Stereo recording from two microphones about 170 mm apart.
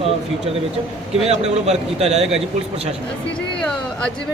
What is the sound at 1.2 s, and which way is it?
A man's voice, 40° right (ahead or behind).